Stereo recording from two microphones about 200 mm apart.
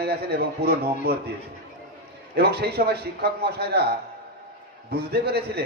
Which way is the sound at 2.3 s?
55° right (ahead or behind).